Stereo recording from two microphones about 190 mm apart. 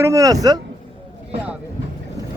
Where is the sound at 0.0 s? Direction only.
15° right (ahead or behind).